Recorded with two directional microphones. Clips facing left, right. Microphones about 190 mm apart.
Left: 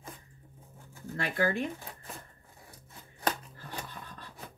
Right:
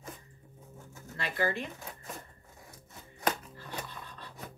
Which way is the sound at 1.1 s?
50° left (ahead or behind).